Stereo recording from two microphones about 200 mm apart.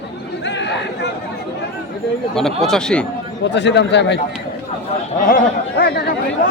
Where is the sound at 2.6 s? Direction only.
5° left (ahead or behind).